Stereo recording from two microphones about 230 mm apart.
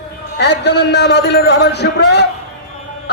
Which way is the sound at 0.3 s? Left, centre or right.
Left.